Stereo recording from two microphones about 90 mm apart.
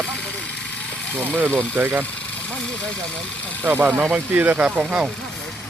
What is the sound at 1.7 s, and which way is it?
Speech, 25° right (ahead or behind).